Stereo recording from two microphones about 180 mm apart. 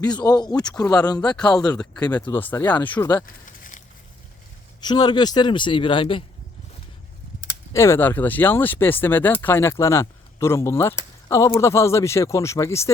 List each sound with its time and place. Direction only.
0.0 s a man's voice: 20° left (ahead or behind)
2.3 s speech: 10° left (ahead or behind)
3.2 s a sound: 50° left (ahead or behind)
4.8 s a man's voice: 25° left (ahead or behind)
7.7 s speech: 15° left (ahead or behind)